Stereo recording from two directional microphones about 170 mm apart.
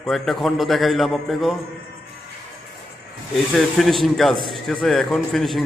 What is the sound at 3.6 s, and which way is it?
A man's voice, centre (ahead or behind).